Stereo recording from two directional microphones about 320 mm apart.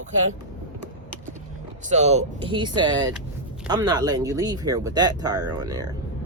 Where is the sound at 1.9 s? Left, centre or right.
Right.